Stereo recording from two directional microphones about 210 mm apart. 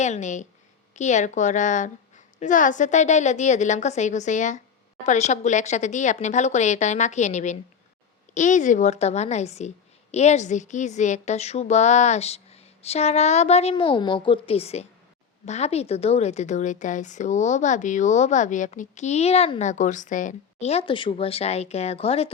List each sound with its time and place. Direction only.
0.0 s a woman's voice: 35° left (ahead or behind)